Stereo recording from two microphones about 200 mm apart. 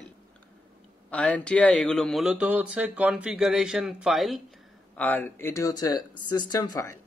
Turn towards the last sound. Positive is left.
turn(degrees=15)  # may be behind; listen again after turning